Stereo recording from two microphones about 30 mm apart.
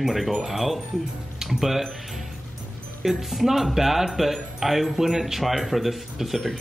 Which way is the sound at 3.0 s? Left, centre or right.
Centre.